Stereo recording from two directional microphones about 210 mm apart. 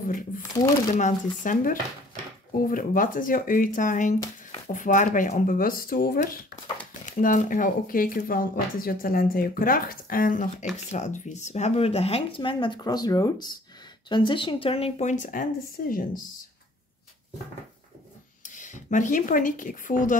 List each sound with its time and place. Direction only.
0.9 s speech: 35° left (ahead or behind)
18.4 s speech: 35° left (ahead or behind)